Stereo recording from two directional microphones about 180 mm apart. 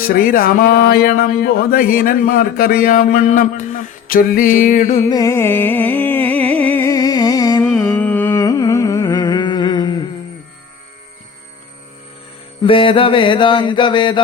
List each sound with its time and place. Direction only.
0.0 s speech: 50° left (ahead or behind)
5.0 s music: 20° left (ahead or behind)
7.6 s music: 5° left (ahead or behind); by 10.1 s 25° left (ahead or behind)
12.6 s mantra: 30° left (ahead or behind)